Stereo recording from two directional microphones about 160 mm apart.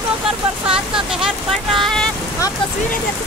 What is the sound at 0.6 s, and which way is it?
Speech, 5° right (ahead or behind).